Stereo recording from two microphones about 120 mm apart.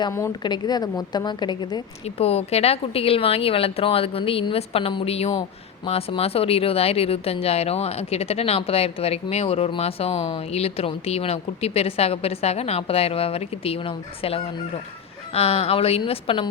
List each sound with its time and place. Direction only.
0.4 s a woman's voice: 40° left (ahead or behind)
2.0 s speech: 60° left (ahead or behind)